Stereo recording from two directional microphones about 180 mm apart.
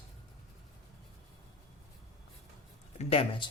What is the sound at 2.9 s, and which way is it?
Speech, 30° left (ahead or behind).